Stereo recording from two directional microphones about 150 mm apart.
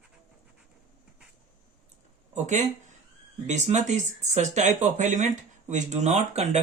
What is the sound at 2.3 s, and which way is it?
Speech, 50° right (ahead or behind).